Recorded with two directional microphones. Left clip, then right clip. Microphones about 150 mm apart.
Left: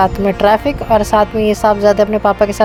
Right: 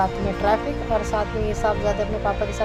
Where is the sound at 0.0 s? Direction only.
90° left.